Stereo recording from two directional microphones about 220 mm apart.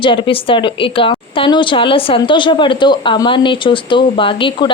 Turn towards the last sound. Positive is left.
turn(degrees=20)  # may be behind; listen again after turning